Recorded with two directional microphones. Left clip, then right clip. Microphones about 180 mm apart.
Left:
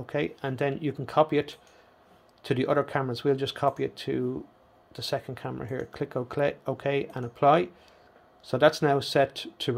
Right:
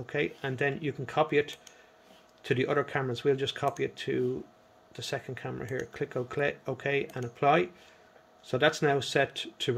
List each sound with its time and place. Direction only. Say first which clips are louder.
0.0 s speech: left 2 dB; 20° left (ahead or behind)